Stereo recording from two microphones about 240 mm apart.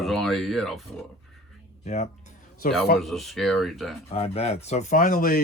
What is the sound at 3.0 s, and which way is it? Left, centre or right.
Speech, centre.